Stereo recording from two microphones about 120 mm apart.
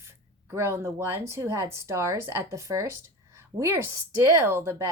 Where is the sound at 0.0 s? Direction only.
20° right (ahead or behind).